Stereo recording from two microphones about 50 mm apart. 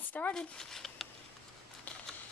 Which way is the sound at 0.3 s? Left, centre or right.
Centre.